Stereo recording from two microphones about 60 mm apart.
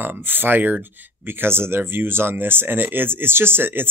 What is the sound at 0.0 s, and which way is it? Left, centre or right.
Speech, right.